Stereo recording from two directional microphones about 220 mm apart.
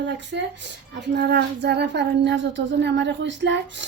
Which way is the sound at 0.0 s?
55° right (ahead or behind).